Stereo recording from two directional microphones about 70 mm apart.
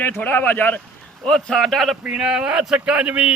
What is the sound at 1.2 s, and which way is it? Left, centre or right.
Speech, centre.